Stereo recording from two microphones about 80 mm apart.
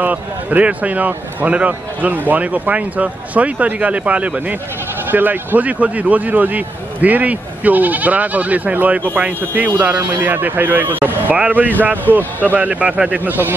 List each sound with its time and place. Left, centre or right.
0.0 s a man's voice: centre